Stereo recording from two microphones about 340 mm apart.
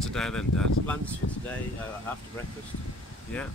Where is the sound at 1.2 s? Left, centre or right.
Left.